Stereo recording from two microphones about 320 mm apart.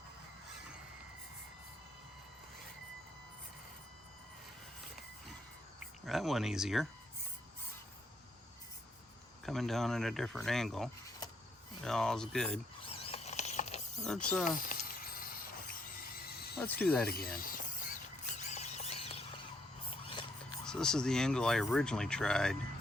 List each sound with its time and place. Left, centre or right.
6.1 s speech: centre
9.5 s speech: centre
13.0 s a sound: centre
14.0 s speech: centre
14.5 s a sound: left
16.0 s neigh: left
16.6 s speech: centre
17.1 s a sound: left
20.7 s speech: centre